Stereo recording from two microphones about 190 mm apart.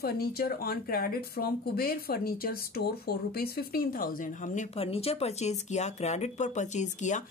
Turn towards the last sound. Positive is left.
turn(degrees=40)  # may be behind; listen again after turning